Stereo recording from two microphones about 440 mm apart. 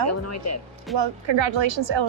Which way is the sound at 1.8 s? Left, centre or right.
Right.